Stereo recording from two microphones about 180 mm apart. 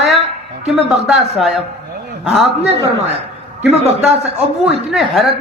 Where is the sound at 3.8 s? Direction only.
35° right (ahead or behind).